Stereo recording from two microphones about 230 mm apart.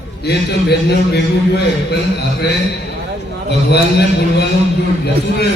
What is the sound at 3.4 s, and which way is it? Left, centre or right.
A man's voice, left.